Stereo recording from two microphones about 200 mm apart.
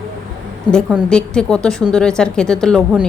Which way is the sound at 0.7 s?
Centre (ahead or behind).